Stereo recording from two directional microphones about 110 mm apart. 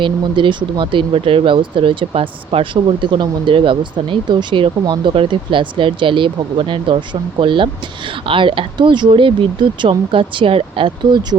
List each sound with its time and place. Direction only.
0.0 s speech: 50° right (ahead or behind)